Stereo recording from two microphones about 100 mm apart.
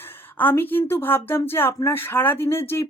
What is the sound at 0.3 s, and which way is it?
Speech, 20° left (ahead or behind).